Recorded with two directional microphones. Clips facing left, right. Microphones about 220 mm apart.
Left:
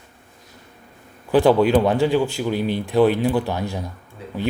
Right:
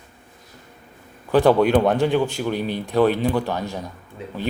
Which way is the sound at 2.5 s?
15° right (ahead or behind).